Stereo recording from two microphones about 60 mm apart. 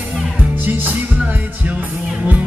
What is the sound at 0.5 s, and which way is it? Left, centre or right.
Music, right.